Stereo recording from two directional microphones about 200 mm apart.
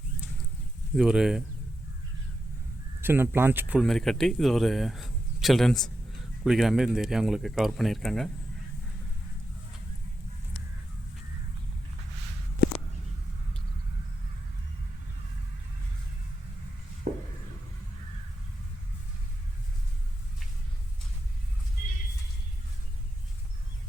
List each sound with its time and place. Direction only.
0.9 s speech: 5° right (ahead or behind)
3.0 s speech: 10° right (ahead or behind)
17.1 s a sound: 35° right (ahead or behind)